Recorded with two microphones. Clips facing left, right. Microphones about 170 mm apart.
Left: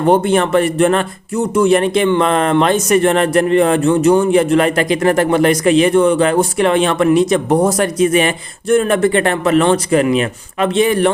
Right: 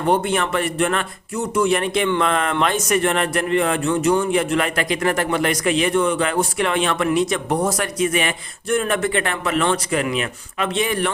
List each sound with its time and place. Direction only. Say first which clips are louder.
0.1 s speech: left 7 dB; 30° left (ahead or behind)